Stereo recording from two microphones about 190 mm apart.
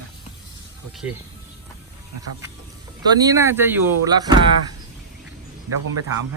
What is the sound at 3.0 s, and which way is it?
Speech, 20° right (ahead or behind).